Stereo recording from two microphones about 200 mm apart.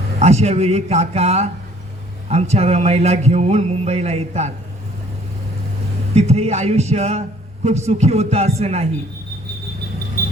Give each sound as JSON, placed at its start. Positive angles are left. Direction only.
{"t": 0.2, "sound": "speech", "side_deg": -35}
{"t": 6.1, "sound": "speech", "side_deg": -30}